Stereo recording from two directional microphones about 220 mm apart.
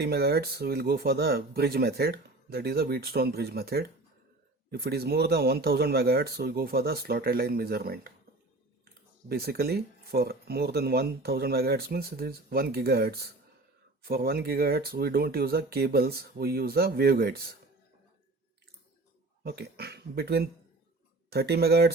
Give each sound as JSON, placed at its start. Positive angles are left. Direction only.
{"t": 0.0, "sound": "speech", "side_deg": -45}
{"t": 9.3, "sound": "speech", "side_deg": -45}
{"t": 19.4, "sound": "speech", "side_deg": -45}